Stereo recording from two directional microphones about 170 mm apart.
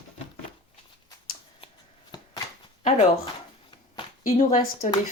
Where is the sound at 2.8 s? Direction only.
35° left (ahead or behind).